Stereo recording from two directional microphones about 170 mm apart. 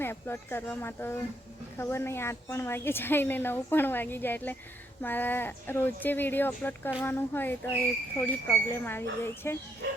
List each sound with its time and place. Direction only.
0.0 s a woman's voice: 15° left (ahead or behind)